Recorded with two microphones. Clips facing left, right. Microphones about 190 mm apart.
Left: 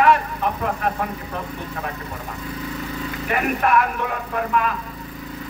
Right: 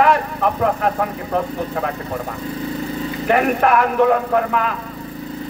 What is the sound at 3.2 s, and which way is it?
Speech, 50° right (ahead or behind).